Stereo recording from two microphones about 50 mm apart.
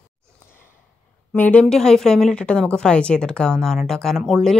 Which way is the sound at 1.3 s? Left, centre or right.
Left.